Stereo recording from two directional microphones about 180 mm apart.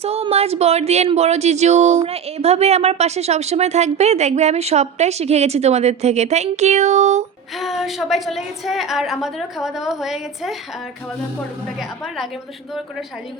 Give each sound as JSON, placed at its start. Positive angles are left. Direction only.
{"t": 0.0, "sound": "speech", "side_deg": -35}
{"t": 7.6, "sound": "a woman's voice", "side_deg": 0}
{"t": 11.8, "sound": "a woman's voice", "side_deg": 0}